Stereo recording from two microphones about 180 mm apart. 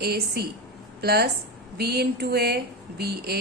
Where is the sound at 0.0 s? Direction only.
60° right (ahead or behind).